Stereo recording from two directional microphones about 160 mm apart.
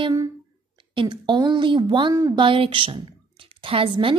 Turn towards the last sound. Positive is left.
turn(degrees=-35)  # may be behind; listen again after turning